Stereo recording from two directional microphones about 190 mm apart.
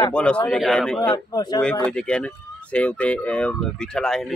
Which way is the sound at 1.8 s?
5° left (ahead or behind).